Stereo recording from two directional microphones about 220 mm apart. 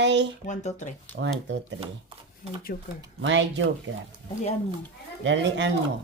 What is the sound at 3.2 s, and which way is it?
Speech, 55° right (ahead or behind).